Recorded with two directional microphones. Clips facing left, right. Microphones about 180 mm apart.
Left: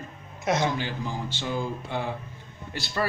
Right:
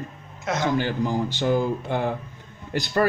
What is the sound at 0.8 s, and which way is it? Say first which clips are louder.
Speech: right 8 dB; 50° right (ahead or behind).